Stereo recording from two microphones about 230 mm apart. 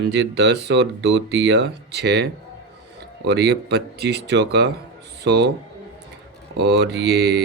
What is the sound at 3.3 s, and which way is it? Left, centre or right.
Speech, right.